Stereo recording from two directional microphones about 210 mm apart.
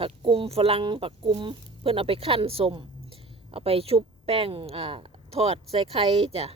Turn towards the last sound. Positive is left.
turn(degrees=-30)  # may be behind; listen again after turning